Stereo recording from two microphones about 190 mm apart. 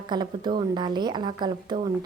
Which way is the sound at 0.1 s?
25° right (ahead or behind).